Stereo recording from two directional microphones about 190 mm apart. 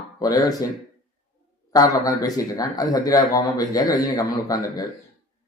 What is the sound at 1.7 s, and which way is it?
Speech, 20° left (ahead or behind).